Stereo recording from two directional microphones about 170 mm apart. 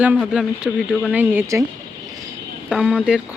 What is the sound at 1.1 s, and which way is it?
Speech, 15° right (ahead or behind).